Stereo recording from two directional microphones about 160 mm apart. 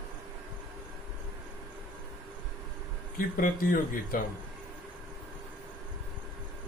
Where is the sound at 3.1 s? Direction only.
60° left (ahead or behind).